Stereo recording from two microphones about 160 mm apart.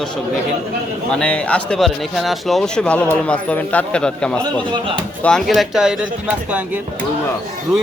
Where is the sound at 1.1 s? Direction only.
5° left (ahead or behind).